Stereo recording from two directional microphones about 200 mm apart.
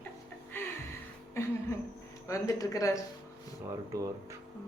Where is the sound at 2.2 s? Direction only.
15° left (ahead or behind).